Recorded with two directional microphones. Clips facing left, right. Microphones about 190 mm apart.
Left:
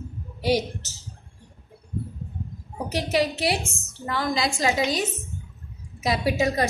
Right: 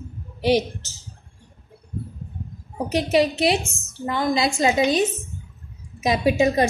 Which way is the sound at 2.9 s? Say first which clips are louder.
Right 5 dB; 20° right (ahead or behind).